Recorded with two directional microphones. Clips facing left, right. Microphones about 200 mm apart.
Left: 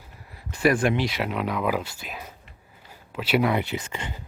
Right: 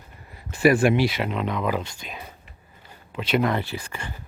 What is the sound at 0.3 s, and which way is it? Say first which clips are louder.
Speech: right 3 dB; 5° right (ahead or behind).